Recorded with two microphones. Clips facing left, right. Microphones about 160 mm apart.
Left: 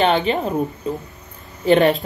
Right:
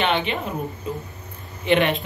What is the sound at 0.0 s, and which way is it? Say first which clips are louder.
Speech: left 5 dB; 35° left (ahead or behind).